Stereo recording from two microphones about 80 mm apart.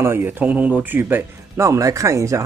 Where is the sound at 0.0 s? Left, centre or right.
Right.